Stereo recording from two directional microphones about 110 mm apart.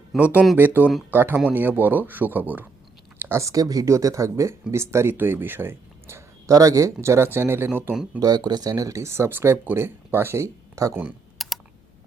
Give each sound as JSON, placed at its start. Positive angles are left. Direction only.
{"t": 0.1, "sound": "speech", "side_deg": 0}
{"t": 0.5, "sound": "speech", "side_deg": -20}
{"t": 8.2, "sound": "speech", "side_deg": -40}
{"t": 11.3, "sound": "computer keyboard", "side_deg": 0}